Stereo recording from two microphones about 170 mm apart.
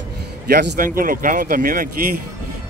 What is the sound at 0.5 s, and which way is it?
Speech, 75° right (ahead or behind).